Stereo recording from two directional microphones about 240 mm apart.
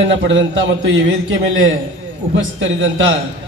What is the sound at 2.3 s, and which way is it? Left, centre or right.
Speech, right.